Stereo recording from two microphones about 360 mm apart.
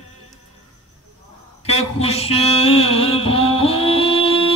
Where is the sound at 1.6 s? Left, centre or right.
Centre.